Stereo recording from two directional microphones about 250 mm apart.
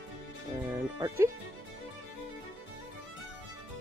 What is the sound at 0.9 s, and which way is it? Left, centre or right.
Music, centre.